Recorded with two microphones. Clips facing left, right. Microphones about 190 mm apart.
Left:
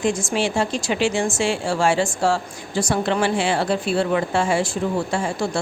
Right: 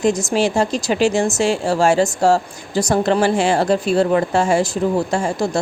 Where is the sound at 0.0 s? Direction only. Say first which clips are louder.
Right 5 dB; 40° right (ahead or behind).